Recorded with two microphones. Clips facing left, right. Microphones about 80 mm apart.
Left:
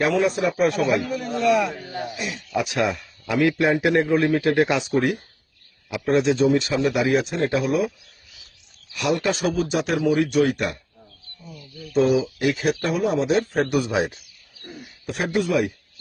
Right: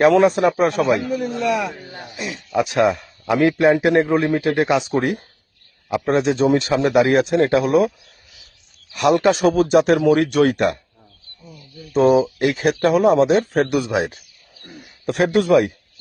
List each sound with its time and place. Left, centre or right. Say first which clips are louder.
0.0 s speech: right 7 dB; right
0.5 s speech: right 3 dB; right
1.3 s speech: left 6 dB; centre
1.8 s a sound: left 5 dB; centre
2.1 s a man's voice: right 7 dB; right
5.9 s speech: right 2 dB; right
8.9 s speech: right 7 dB; right
11.9 s speech: right 5 dB; right
15.0 s speech: right 6 dB; right